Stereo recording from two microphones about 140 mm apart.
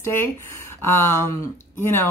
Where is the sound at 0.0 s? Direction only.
15° left (ahead or behind).